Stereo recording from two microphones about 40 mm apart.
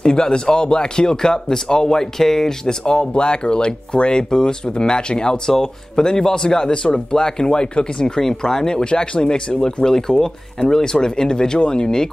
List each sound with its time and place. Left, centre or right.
0.0 s speech: centre